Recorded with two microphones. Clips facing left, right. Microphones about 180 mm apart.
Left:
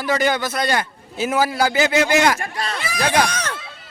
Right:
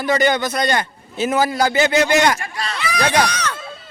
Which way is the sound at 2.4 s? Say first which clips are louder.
Even; 50° left (ahead or behind).